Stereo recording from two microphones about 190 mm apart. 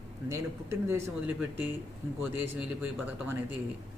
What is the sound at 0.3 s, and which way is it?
A woman's voice, 15° right (ahead or behind).